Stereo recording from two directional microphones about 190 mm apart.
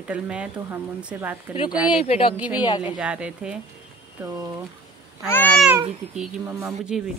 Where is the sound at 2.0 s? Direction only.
30° left (ahead or behind).